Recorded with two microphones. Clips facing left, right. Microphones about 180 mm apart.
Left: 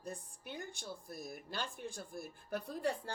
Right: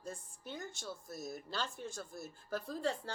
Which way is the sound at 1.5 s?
15° left (ahead or behind).